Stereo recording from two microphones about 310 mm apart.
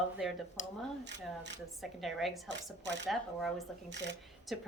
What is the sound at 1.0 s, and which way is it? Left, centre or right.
Speech, right.